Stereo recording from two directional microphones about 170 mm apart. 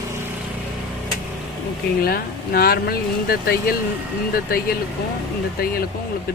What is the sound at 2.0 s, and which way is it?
Speech, 60° left (ahead or behind).